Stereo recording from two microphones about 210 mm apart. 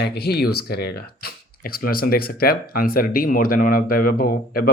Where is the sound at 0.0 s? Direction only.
50° left (ahead or behind).